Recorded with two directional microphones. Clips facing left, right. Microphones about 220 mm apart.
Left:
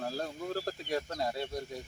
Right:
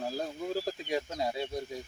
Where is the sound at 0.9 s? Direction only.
15° right (ahead or behind).